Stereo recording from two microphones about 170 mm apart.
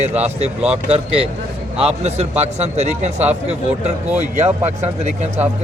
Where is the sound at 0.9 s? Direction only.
35° right (ahead or behind).